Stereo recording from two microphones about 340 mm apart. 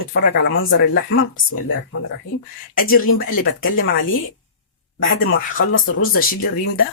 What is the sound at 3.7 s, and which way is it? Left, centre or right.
Speech, left.